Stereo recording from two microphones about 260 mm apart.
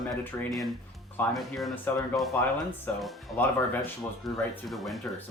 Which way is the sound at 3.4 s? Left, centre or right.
Centre.